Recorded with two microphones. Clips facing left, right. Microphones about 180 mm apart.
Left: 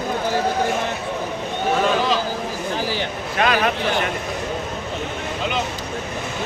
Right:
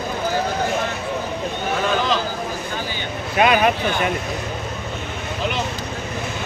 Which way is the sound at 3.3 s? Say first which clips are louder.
Right 3 dB; 15° right (ahead or behind).